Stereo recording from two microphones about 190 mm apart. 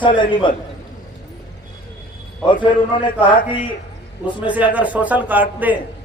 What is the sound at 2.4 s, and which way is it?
Speech, 25° left (ahead or behind).